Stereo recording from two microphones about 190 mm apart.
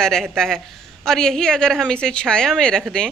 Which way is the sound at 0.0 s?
5° left (ahead or behind).